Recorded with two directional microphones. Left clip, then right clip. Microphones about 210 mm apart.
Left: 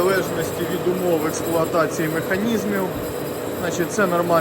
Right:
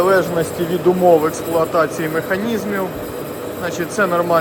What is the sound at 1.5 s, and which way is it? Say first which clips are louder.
Speech: right 3 dB; 10° left (ahead or behind).